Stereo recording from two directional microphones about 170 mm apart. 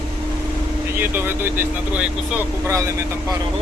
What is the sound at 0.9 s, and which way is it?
Speech, 15° right (ahead or behind).